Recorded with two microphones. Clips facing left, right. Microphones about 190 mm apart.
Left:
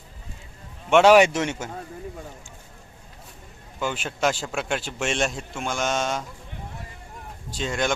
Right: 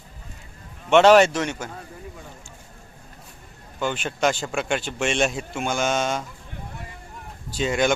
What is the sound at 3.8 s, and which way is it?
Speech, 5° left (ahead or behind).